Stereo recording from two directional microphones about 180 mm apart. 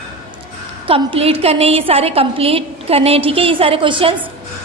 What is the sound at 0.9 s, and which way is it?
A woman's voice, 30° right (ahead or behind).